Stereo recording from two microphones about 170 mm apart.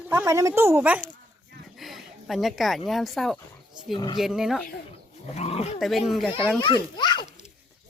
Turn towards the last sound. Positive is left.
turn(degrees=25)  # may be behind; listen again after turning